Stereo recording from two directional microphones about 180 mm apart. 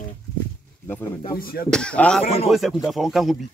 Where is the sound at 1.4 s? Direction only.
55° left (ahead or behind).